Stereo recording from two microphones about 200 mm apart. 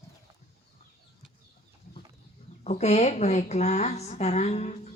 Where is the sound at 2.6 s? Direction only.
35° left (ahead or behind).